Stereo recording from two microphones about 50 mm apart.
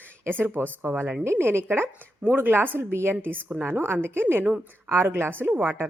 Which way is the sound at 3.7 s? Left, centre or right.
Right.